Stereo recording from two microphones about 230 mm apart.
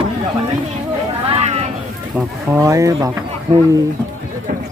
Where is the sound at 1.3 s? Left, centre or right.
Right.